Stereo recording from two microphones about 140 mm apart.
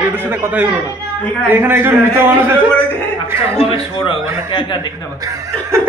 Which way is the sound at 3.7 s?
35° left (ahead or behind).